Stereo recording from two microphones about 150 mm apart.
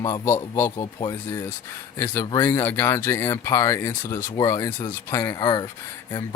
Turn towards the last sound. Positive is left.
turn(degrees=25)  # may be behind; listen again after turning